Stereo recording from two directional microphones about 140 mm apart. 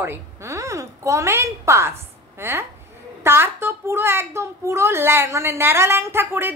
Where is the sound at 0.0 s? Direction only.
20° right (ahead or behind).